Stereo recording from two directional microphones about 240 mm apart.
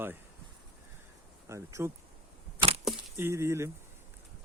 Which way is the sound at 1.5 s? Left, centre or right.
Centre.